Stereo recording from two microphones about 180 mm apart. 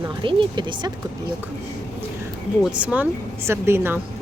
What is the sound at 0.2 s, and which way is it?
Speech, 25° right (ahead or behind).